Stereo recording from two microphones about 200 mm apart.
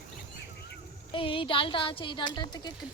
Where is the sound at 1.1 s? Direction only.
25° left (ahead or behind).